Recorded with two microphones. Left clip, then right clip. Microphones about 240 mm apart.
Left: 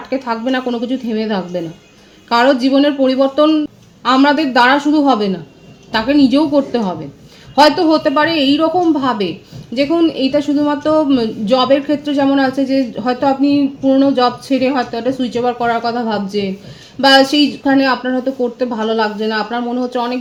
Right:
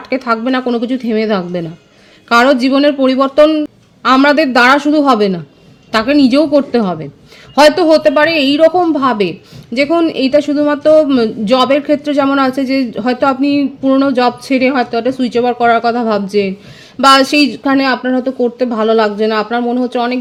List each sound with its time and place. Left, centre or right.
0.1 s a man's voice: right